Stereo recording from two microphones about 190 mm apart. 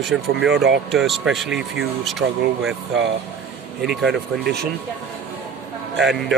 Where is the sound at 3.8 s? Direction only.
Centre (ahead or behind).